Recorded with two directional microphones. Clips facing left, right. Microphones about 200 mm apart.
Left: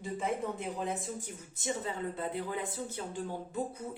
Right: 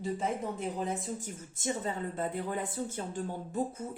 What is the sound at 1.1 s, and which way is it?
Speech, 50° right (ahead or behind).